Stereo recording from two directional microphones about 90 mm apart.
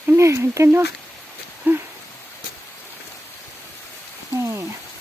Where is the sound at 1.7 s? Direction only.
20° right (ahead or behind).